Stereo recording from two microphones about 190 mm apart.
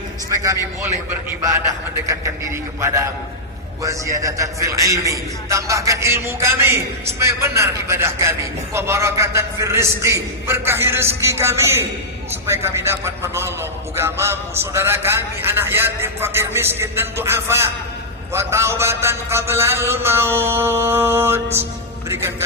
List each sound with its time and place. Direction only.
0.3 s a man's voice: 15° right (ahead or behind)